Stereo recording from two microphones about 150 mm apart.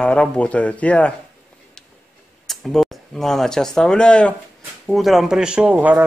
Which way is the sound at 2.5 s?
Centre (ahead or behind).